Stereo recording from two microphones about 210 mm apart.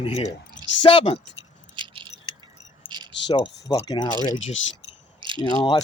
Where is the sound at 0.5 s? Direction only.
60° left (ahead or behind).